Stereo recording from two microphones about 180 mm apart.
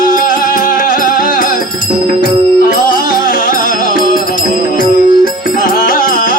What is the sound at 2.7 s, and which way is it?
Music, 50° left (ahead or behind).